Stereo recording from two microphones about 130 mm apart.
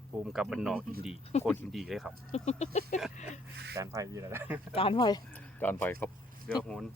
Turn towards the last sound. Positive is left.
turn(degrees=5)  # may be behind; listen again after turning